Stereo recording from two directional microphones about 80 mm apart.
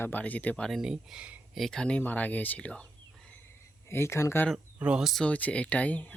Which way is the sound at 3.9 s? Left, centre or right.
Left.